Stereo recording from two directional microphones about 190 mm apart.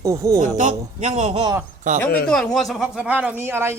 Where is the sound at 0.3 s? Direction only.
40° right (ahead or behind).